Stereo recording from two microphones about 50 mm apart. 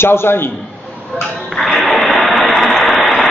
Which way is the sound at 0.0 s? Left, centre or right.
Left.